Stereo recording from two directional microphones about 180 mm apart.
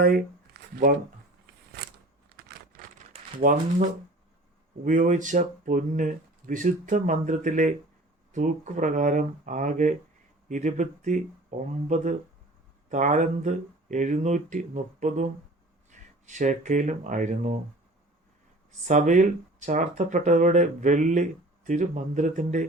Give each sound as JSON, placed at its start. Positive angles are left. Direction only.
{"t": 0.0, "sound": "shuffling cards", "side_deg": -55}
{"t": 2.3, "sound": "a sound", "side_deg": -60}
{"t": 3.4, "sound": "speech", "side_deg": -50}
{"t": 4.9, "sound": "speech", "side_deg": -45}
{"t": 18.9, "sound": "speech", "side_deg": -45}